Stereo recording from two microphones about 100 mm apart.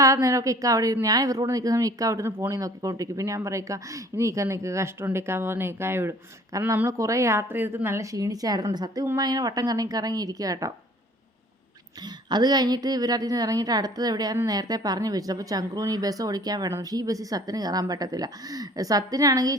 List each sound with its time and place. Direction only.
0.0 s speech: 35° right (ahead or behind)
12.0 s speech: 45° right (ahead or behind)